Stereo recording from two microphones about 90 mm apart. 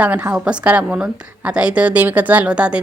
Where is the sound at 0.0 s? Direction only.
20° right (ahead or behind).